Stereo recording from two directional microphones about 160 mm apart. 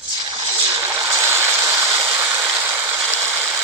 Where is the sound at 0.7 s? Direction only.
15° right (ahead or behind).